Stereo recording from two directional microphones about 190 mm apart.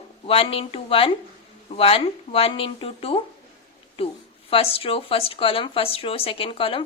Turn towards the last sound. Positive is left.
turn(degrees=30)  # may be behind; listen again after turning